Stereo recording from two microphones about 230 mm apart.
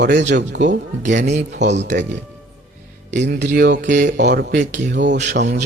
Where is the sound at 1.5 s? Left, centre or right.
Right.